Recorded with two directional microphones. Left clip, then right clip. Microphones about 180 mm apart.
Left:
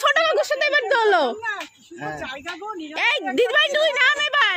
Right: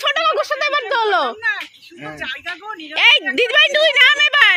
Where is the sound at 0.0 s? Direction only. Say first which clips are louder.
Right 1 dB; 30° left (ahead or behind).